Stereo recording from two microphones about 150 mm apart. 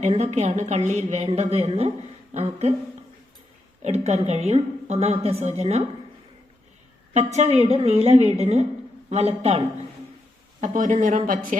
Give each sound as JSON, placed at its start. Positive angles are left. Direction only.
{"t": 0.0, "sound": "a woman's voice", "side_deg": -45}
{"t": 3.8, "sound": "a woman's voice", "side_deg": -45}
{"t": 7.1, "sound": "a woman's voice", "side_deg": -50}
{"t": 10.6, "sound": "speech", "side_deg": -55}